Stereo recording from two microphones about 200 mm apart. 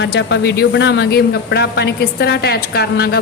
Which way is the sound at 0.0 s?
60° left (ahead or behind).